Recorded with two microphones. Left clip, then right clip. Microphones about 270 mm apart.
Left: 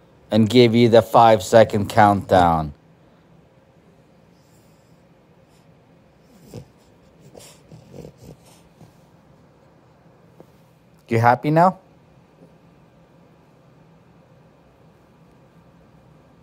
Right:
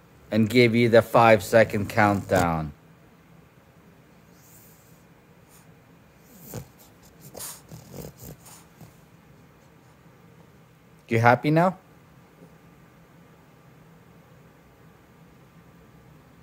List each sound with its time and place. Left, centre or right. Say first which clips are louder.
0.3 s speech: left 5 dB; centre
6.5 s cat: even; centre
7.3 s dog: right 3 dB; right
11.1 s speech: left 3 dB; centre